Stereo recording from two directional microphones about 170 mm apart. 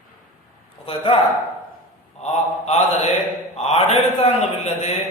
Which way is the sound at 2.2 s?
40° left (ahead or behind).